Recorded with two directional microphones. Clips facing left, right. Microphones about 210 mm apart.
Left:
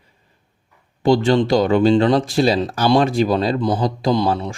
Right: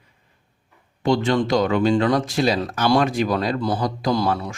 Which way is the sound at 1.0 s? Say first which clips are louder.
Left 4 dB; 30° left (ahead or behind).